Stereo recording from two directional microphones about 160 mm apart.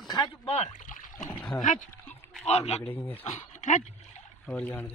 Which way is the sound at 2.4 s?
45° left (ahead or behind).